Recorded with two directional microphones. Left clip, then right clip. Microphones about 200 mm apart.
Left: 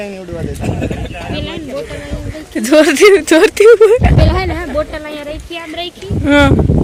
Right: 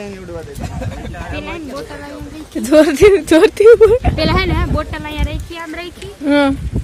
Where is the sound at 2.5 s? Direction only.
Centre (ahead or behind).